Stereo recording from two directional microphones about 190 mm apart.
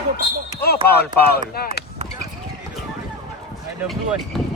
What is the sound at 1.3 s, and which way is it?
Speech, 55° left (ahead or behind).